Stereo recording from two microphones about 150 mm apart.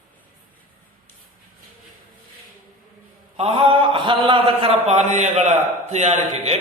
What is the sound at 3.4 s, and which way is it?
A man's voice, 40° right (ahead or behind).